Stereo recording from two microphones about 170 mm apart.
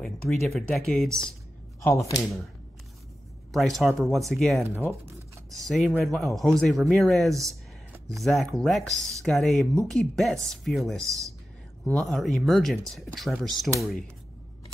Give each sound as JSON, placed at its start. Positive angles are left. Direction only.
{"t": 0.0, "sound": "speech", "side_deg": 0}
{"t": 1.8, "sound": "speech", "side_deg": 15}
{"t": 3.5, "sound": "speech", "side_deg": 0}